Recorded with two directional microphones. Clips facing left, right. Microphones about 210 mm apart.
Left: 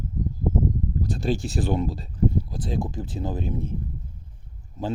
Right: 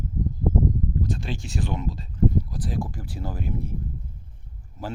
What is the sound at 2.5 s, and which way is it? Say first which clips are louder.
Speech: left 2 dB; 25° left (ahead or behind).